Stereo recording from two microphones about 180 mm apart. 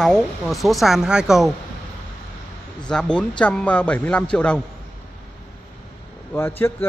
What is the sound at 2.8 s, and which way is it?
Speech, 5° left (ahead or behind).